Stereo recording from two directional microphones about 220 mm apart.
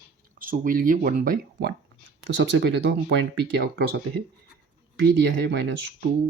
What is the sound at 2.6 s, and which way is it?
Speech, 50° right (ahead or behind).